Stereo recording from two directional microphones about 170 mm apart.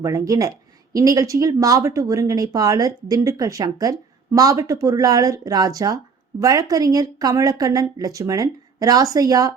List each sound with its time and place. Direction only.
0.0 s speech: 20° right (ahead or behind)